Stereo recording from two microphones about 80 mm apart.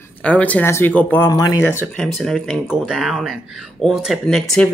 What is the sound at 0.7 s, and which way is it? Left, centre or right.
Speech, left.